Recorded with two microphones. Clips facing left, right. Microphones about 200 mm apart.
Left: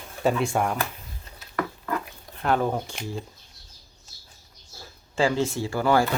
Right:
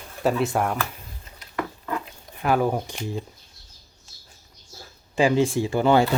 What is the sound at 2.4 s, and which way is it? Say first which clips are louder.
Speech: right 2 dB; 10° right (ahead or behind).